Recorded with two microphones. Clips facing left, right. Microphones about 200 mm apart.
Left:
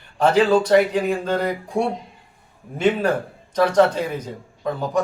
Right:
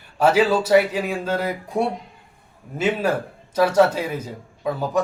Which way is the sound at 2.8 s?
5° right (ahead or behind).